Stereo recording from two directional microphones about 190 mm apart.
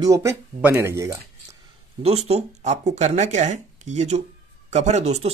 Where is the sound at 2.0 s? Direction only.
35° right (ahead or behind).